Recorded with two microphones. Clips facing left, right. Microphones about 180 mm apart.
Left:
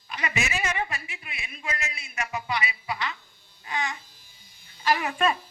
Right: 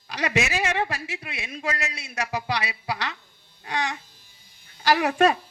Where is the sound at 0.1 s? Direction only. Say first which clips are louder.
Right 5 dB; 80° right.